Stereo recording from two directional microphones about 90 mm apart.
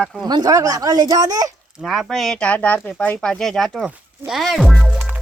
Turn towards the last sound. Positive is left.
turn(degrees=-5)  # may be behind; listen again after turning